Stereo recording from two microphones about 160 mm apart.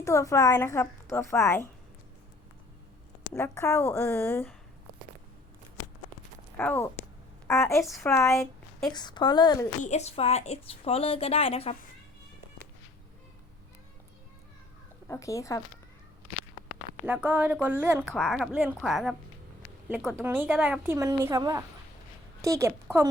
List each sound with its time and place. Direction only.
0.0 s a woman's voice: 20° left (ahead or behind)
3.3 s a woman's voice: 15° left (ahead or behind)
6.6 s a woman's voice: 10° left (ahead or behind)
8.9 s a woman's voice: 25° left (ahead or behind)
9.8 s a woman's voice: 45° left (ahead or behind)
15.0 s a woman's voice: 20° left (ahead or behind)
17.1 s a woman's voice: 10° right (ahead or behind)
20.2 s a woman's voice: 10° right (ahead or behind)